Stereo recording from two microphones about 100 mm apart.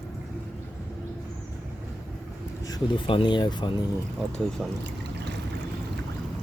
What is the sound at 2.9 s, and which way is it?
Speech, 55° left (ahead or behind).